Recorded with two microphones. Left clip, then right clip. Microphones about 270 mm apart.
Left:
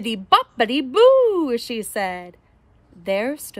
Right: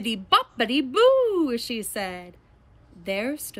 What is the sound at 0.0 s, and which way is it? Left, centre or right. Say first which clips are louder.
A woman's voice: left 4 dB; left.